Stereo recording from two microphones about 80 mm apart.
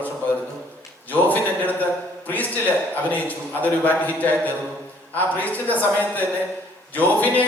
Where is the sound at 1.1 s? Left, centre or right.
Left.